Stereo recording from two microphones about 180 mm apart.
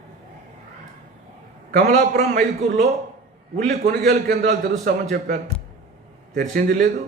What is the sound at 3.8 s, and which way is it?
Speech, 60° right (ahead or behind).